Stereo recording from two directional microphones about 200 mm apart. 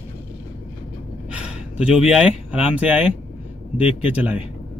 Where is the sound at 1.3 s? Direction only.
5° right (ahead or behind).